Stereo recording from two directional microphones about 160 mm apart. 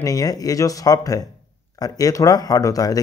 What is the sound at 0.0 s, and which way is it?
Speech, 25° left (ahead or behind).